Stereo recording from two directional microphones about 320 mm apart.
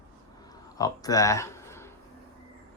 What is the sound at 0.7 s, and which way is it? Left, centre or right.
Speech, centre.